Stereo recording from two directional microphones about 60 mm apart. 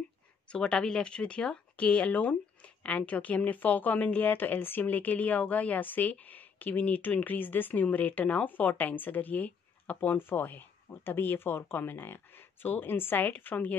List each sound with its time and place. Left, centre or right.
0.5 s a woman's voice: centre
10.1 s speech: left